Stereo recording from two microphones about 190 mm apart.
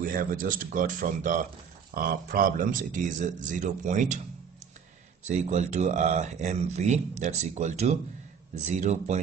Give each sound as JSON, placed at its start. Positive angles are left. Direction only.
{"t": 0.0, "sound": "speech", "side_deg": -45}
{"t": 5.3, "sound": "speech", "side_deg": -35}